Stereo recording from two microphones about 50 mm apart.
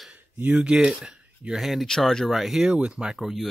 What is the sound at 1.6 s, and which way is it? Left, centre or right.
Speech, centre.